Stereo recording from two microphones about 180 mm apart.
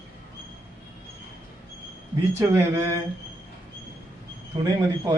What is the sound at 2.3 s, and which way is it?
Speech, 15° right (ahead or behind).